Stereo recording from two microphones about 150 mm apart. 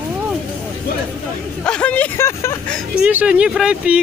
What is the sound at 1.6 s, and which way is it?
Speech, 5° left (ahead or behind).